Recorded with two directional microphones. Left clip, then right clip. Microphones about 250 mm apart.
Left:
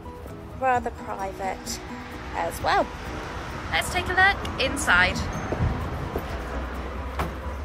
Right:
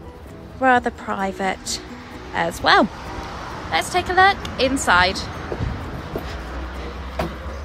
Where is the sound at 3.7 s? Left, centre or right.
Right.